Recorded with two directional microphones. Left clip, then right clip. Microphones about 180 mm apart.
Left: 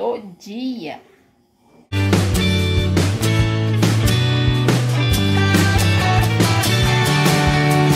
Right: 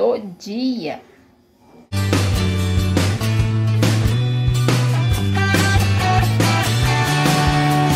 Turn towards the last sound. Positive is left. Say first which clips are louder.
# even
turn(degrees=0)  # may be behind; listen again after turning